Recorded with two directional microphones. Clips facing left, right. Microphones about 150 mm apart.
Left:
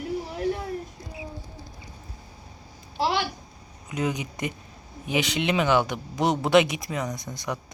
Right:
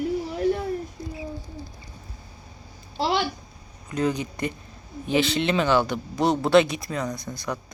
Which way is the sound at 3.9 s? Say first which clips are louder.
Right 3 dB; 15° left (ahead or behind).